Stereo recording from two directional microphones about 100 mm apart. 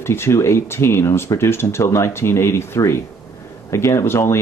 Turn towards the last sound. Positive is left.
turn(degrees=25)  # may be behind; listen again after turning